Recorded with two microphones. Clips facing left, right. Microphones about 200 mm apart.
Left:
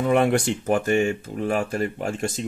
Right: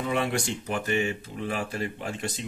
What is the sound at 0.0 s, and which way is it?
Speech, 55° left (ahead or behind).